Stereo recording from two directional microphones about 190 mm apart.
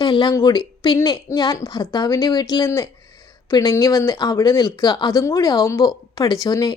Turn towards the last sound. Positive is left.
turn(degrees=20)  # may be behind; listen again after turning